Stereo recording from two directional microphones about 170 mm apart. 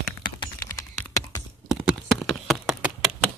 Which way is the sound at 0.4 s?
20° left (ahead or behind).